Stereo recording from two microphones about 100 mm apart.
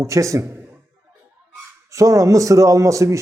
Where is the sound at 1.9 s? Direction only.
30° right (ahead or behind).